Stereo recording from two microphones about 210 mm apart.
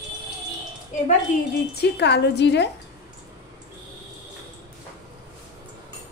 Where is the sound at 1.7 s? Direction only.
55° left (ahead or behind).